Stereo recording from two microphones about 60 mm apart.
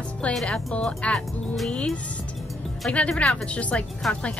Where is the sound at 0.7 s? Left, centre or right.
Left.